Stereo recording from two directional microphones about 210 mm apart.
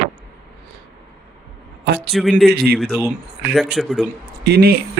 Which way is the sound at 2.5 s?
45° right (ahead or behind).